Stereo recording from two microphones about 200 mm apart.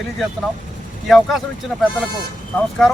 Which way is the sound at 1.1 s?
Centre (ahead or behind).